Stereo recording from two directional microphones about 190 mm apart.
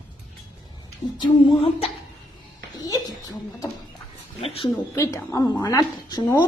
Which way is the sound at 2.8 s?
20° left (ahead or behind).